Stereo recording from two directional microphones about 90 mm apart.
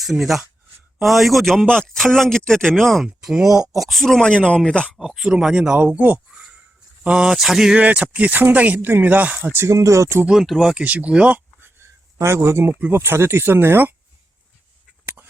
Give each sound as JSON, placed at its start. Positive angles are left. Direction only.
{"t": 0.0, "sound": "speech", "side_deg": 0}
{"t": 4.9, "sound": "speech", "side_deg": -5}
{"t": 7.8, "sound": "speech", "side_deg": -15}
{"t": 10.2, "sound": "speech", "side_deg": -5}
{"t": 10.8, "sound": "speech", "side_deg": -15}
{"t": 12.2, "sound": "speech", "side_deg": -30}
{"t": 15.0, "sound": "duck", "side_deg": -20}